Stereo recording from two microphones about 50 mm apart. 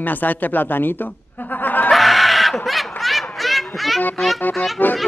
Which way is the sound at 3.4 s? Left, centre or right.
Centre.